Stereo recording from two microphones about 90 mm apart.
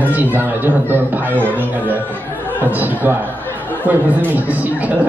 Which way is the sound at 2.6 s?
20° right (ahead or behind).